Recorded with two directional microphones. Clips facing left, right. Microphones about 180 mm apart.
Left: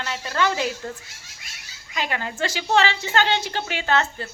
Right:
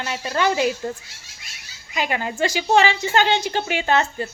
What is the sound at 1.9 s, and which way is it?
A woman's voice, 15° right (ahead or behind).